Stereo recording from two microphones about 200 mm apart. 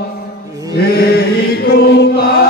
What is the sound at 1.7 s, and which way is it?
Chant, 55° left (ahead or behind).